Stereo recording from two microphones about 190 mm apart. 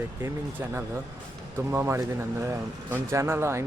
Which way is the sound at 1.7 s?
15° right (ahead or behind).